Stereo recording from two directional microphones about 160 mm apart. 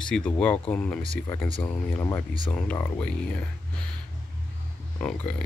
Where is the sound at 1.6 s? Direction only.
15° left (ahead or behind).